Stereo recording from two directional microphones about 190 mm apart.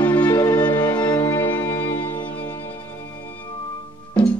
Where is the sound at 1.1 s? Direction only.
10° left (ahead or behind).